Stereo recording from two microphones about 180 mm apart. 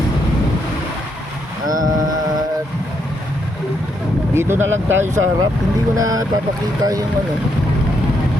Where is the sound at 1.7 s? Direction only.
20° right (ahead or behind).